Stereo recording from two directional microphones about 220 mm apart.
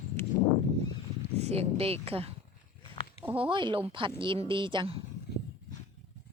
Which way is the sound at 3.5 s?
20° right (ahead or behind).